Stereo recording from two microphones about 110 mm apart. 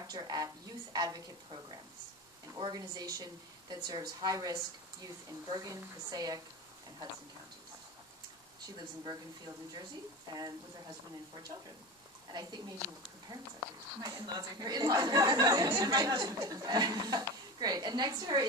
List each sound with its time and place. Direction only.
0.0 s a woman's voice: 35° right (ahead or behind)
8.6 s a woman's voice: 40° right (ahead or behind)
12.3 s a woman's voice: 35° right (ahead or behind)